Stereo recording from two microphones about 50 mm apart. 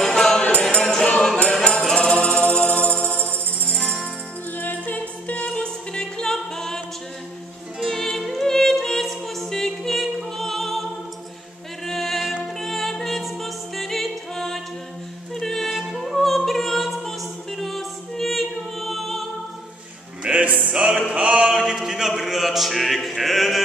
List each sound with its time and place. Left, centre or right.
0.1 s music: centre
3.7 s music: centre
4.6 s music: left; by 6.8 s centre
7.9 s music: centre
15.7 s music: centre
20.2 s music: right
21.1 s chant: right
21.5 s music: centre